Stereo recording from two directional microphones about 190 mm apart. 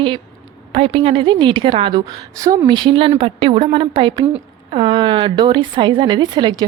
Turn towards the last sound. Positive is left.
turn(degrees=-20)  # may be behind; listen again after turning